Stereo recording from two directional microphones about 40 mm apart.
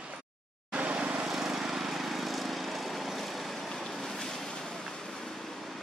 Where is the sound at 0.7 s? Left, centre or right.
Right.